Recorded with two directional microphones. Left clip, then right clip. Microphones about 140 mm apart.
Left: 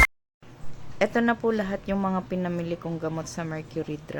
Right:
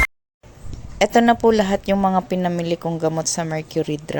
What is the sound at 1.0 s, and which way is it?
A woman's voice, 40° right (ahead or behind).